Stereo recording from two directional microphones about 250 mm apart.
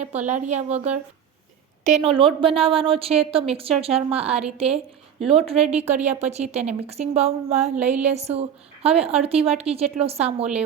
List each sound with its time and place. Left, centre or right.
0.0 s a woman's voice: right
7.8 s a sound: centre
8.1 s a woman's voice: right